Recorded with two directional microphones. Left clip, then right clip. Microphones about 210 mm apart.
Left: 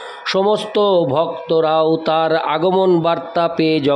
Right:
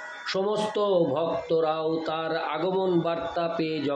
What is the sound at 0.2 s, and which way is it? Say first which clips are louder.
Speech: left 10 dB; 55° left (ahead or behind).